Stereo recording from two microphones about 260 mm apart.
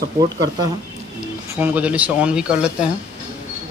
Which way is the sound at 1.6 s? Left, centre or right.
Centre.